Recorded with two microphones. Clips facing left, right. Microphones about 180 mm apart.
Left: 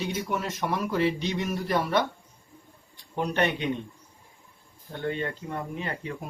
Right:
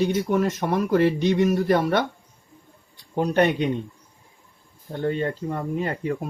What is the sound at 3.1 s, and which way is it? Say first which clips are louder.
Speech: right 6 dB; 40° right (ahead or behind).